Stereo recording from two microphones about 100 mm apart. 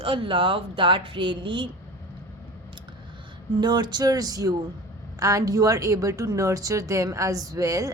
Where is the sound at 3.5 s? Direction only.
45° right (ahead or behind).